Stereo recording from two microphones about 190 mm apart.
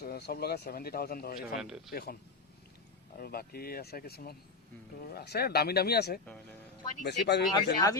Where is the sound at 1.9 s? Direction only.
55° left (ahead or behind).